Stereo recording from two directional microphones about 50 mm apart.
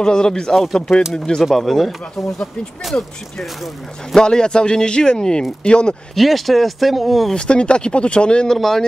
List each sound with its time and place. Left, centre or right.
0.0 s speech: centre
1.4 s speech: centre
4.1 s speech: centre
6.1 s speech: centre
7.3 s speech: centre
8.5 s speech: centre